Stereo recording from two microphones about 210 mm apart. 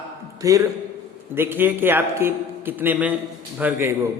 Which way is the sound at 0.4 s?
15° right (ahead or behind).